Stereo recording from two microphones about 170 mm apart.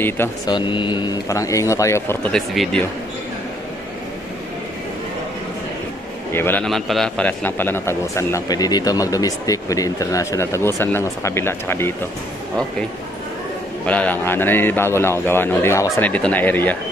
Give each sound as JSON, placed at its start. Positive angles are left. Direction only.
{"t": 0.5, "sound": "speech", "side_deg": 30}
{"t": 2.3, "sound": "speech", "side_deg": 0}
{"t": 6.3, "sound": "a man's voice", "side_deg": 10}
{"t": 13.8, "sound": "a man's voice", "side_deg": 10}